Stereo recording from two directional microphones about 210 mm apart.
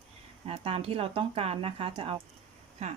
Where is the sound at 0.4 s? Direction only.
30° right (ahead or behind).